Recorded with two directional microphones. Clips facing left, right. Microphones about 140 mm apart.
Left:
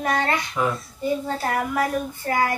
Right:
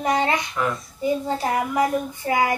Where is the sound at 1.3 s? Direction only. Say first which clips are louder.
Right 1 dB; 15° right (ahead or behind).